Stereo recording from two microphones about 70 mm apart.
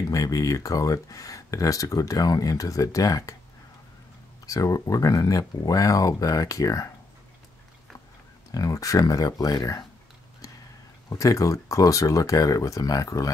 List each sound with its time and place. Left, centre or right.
0.1 s speech: left
4.5 s speech: left
8.5 s speech: left
11.1 s speech: left